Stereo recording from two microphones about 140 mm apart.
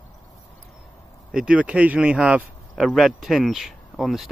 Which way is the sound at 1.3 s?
10° right (ahead or behind).